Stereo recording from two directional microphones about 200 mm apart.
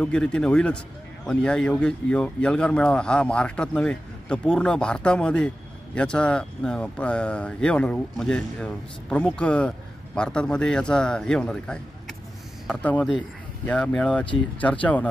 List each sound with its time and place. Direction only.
0.0 s speech: 5° left (ahead or behind)